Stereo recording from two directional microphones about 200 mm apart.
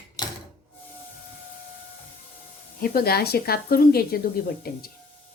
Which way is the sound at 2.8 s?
50° left (ahead or behind).